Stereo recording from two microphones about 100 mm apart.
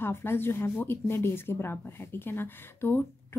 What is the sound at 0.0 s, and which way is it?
A woman's voice, 20° left (ahead or behind).